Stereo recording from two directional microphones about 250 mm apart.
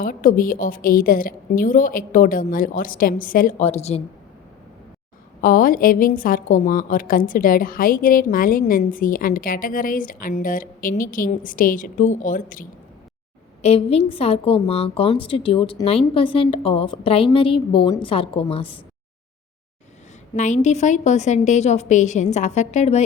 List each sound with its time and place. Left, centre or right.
0.0 s a woman's voice: left
5.4 s a woman's voice: left
20.3 s a woman's voice: left